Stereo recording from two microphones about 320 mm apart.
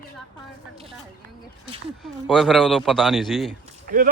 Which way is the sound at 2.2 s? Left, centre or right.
Centre.